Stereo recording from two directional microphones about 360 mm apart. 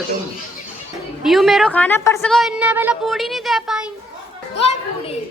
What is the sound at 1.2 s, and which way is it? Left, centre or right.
A woman's voice, centre.